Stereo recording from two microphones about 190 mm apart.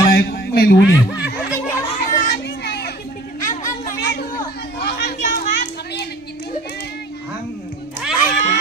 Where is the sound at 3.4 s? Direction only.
45° left (ahead or behind).